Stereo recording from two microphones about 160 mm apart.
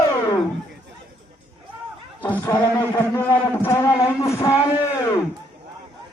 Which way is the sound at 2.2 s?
10° left (ahead or behind).